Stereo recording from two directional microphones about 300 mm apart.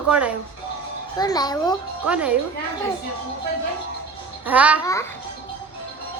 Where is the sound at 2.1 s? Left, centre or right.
Centre.